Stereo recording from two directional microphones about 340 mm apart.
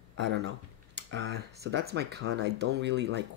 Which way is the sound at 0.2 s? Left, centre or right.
Right.